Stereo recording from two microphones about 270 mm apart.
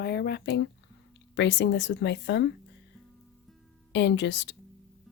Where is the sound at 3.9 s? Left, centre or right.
Left.